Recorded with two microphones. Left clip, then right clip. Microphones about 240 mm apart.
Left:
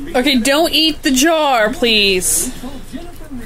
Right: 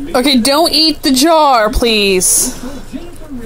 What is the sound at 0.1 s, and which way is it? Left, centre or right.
Speech, right.